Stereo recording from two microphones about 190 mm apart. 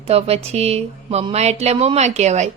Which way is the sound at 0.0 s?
30° right (ahead or behind).